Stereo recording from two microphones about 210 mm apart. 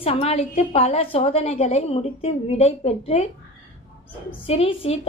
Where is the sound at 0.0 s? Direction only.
30° left (ahead or behind).